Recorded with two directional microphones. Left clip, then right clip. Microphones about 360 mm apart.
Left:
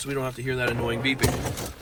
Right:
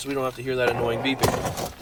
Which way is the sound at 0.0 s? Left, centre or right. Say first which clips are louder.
Right 2 dB; centre.